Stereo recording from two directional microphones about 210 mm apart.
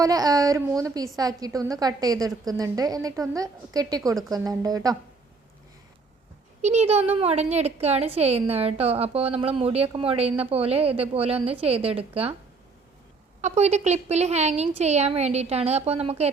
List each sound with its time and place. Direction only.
0.0 s a woman's voice: 15° right (ahead or behind)
6.6 s a woman's voice: 30° right (ahead or behind)
13.4 s a woman's voice: 30° right (ahead or behind)